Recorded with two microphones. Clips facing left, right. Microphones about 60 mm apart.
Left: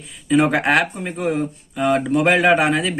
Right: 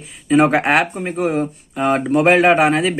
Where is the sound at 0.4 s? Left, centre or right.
Centre.